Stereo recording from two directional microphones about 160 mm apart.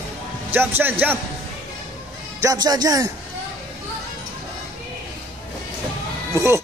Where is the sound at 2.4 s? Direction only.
25° right (ahead or behind).